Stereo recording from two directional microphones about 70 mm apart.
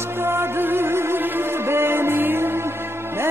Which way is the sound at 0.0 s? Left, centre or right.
Right.